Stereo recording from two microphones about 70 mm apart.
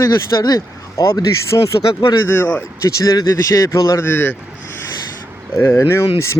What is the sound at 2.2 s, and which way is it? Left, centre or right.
Speech, left.